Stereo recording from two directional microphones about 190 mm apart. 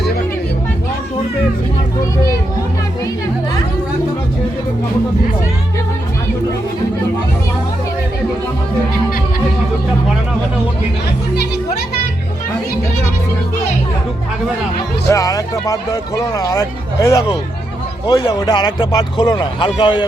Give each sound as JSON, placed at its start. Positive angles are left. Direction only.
{"t": 15.1, "sound": "a man's voice", "side_deg": 15}